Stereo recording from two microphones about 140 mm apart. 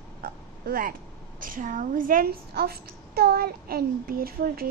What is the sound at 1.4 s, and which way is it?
A child's voice, 75° right (ahead or behind).